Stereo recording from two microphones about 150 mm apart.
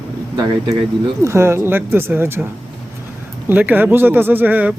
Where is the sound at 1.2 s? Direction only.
20° right (ahead or behind).